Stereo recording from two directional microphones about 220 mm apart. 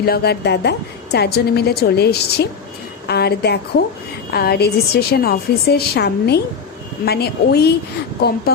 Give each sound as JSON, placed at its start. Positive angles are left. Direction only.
{"t": 0.0, "sound": "a woman's voice", "side_deg": 45}